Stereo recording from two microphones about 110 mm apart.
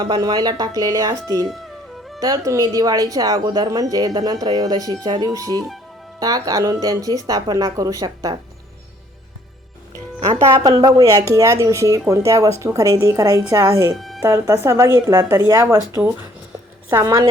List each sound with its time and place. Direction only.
0.0 s speech: 40° right (ahead or behind)
10.5 s speech: 35° right (ahead or behind)
13.9 s speech: centre (ahead or behind)
14.2 s speech: 25° right (ahead or behind)
16.9 s speech: 30° right (ahead or behind)